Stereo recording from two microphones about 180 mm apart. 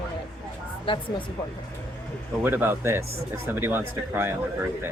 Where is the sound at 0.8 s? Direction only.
30° left (ahead or behind).